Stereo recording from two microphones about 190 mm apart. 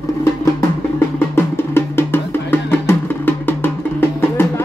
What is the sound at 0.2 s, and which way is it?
Music, 15° left (ahead or behind).